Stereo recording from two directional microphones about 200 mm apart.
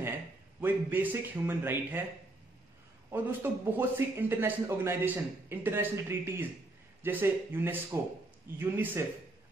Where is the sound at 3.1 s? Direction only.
10° right (ahead or behind).